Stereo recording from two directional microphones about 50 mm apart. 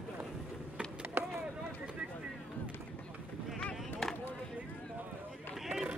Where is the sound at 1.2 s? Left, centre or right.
Right.